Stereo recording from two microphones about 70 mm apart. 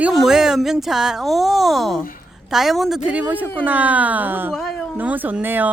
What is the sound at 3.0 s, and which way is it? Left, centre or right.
Speech, right.